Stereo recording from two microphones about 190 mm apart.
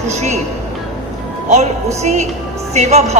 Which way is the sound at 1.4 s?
35° right (ahead or behind).